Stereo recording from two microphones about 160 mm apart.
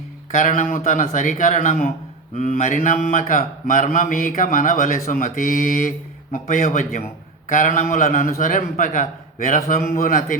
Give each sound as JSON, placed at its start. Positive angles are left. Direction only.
{"t": 0.3, "sound": "a man's voice", "side_deg": 50}